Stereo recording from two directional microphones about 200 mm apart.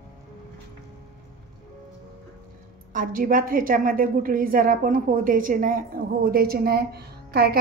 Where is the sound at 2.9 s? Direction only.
45° right (ahead or behind).